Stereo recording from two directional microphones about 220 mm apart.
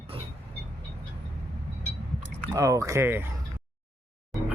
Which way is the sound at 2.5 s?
15° right (ahead or behind).